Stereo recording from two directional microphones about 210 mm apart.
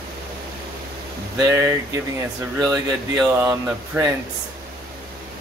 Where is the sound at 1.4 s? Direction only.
10° right (ahead or behind).